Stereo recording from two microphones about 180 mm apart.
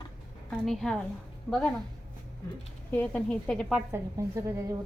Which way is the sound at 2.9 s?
10° left (ahead or behind).